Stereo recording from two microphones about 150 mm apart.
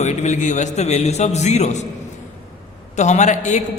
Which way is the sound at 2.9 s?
50° left (ahead or behind).